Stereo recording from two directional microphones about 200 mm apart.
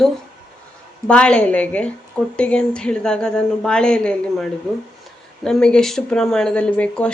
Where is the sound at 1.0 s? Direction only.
5° left (ahead or behind).